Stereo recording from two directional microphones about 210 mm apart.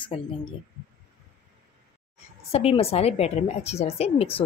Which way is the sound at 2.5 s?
30° left (ahead or behind).